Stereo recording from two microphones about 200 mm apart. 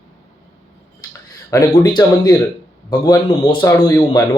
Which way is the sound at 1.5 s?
20° left (ahead or behind).